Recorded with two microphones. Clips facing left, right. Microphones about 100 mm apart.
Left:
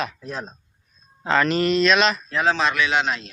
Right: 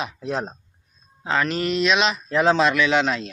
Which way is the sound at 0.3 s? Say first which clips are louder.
Right 6 dB; 80° right.